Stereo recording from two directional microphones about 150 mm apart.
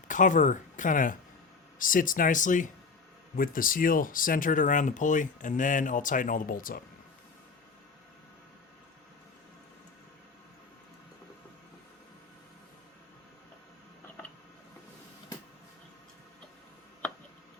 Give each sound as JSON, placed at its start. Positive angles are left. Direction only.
{"t": 0.1, "sound": "speech", "side_deg": 60}
{"t": 3.3, "sound": "speech", "side_deg": 70}